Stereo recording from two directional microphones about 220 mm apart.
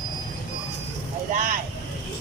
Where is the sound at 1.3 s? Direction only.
35° right (ahead or behind).